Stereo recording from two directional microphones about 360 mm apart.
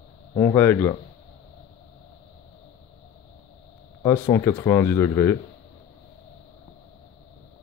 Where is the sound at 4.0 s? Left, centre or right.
Centre.